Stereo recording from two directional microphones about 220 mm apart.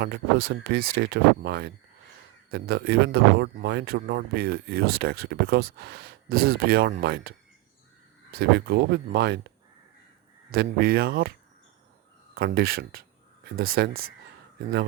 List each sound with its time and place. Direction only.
0.0 s speech: 45° right (ahead or behind)
10.5 s speech: 45° right (ahead or behind)
12.3 s speech: 45° right (ahead or behind)